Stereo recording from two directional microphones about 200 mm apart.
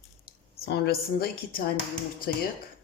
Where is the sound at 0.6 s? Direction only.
55° left (ahead or behind).